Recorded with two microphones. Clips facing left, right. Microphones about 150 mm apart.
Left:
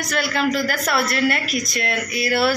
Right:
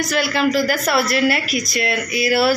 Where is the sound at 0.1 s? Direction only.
Centre (ahead or behind).